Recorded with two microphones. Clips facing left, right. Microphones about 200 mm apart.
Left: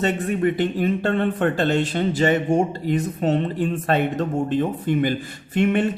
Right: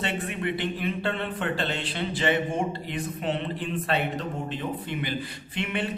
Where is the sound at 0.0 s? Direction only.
40° left (ahead or behind).